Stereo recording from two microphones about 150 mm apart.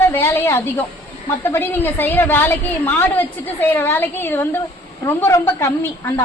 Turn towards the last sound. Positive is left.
turn(degrees=20)  # may be behind; listen again after turning